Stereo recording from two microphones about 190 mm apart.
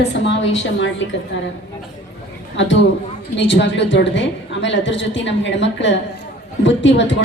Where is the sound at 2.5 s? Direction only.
75° left (ahead or behind).